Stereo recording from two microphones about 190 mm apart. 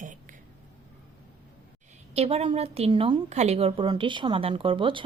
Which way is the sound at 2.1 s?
35° right (ahead or behind).